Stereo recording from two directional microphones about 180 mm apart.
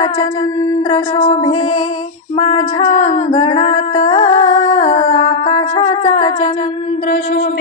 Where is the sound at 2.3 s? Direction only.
40° left (ahead or behind).